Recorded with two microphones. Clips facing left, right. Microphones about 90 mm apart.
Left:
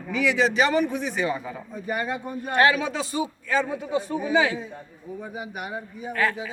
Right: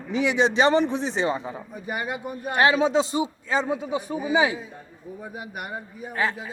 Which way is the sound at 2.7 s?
25° right (ahead or behind).